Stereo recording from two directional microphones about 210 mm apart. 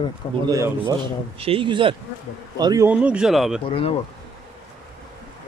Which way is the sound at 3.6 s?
25° left (ahead or behind).